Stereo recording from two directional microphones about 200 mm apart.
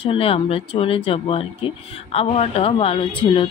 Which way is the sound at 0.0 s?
30° left (ahead or behind).